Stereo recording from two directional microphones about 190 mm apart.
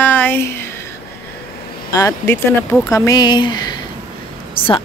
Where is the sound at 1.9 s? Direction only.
15° left (ahead or behind).